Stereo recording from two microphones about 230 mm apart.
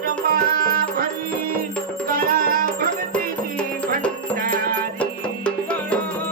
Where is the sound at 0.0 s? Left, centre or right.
Right.